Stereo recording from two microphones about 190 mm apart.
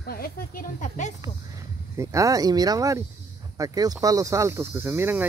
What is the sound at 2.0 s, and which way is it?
Speech, 15° right (ahead or behind).